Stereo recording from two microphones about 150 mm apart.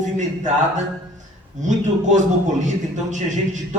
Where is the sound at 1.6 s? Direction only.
55° right (ahead or behind).